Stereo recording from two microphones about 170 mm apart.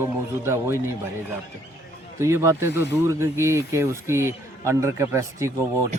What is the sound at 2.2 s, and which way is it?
A man's voice, 15° right (ahead or behind).